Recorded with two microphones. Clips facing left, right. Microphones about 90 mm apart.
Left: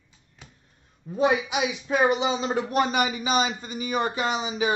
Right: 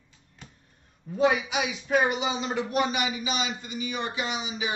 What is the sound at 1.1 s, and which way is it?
Speech, 20° left (ahead or behind).